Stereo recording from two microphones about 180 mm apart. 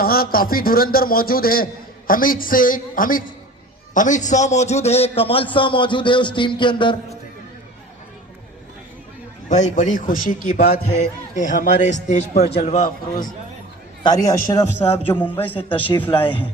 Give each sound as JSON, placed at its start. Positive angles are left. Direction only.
{"t": 0.0, "sound": "a man's voice", "side_deg": 55}
{"t": 9.5, "sound": "speech", "side_deg": 40}
{"t": 11.0, "sound": "a man's voice", "side_deg": 45}
{"t": 14.0, "sound": "speech", "side_deg": 20}
{"t": 14.7, "sound": "a man's voice", "side_deg": 35}
{"t": 15.0, "sound": "a man's voice", "side_deg": 10}
{"t": 15.9, "sound": "speech", "side_deg": 25}